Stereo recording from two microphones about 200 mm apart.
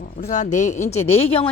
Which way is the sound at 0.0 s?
45° left (ahead or behind).